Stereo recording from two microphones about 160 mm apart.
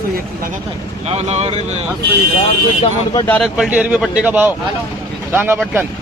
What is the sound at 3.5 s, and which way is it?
A man's voice, 5° right (ahead or behind).